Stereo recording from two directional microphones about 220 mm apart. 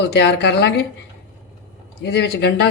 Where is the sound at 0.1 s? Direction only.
50° left (ahead or behind).